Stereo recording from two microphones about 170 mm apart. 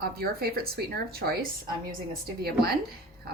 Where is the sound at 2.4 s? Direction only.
65° right (ahead or behind).